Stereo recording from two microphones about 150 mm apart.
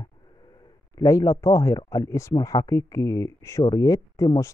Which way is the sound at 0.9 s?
20° left (ahead or behind).